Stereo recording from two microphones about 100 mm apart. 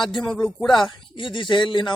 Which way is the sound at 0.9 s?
55° left (ahead or behind).